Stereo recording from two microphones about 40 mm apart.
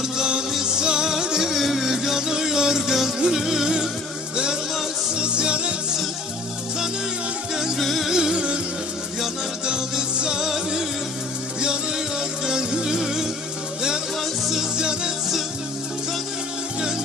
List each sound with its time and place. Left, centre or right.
0.5 s music: centre
1.5 s music: centre
1.9 s music: centre
5.1 s music: right
7.7 s music: centre
8.1 s music: centre
9.7 s music: right
12.4 s music: centre
14.4 s music: centre
14.8 s music: right